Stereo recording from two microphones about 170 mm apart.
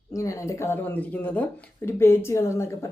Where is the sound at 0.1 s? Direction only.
20° left (ahead or behind).